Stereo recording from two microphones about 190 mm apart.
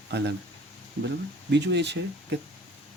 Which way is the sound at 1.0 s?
65° right (ahead or behind).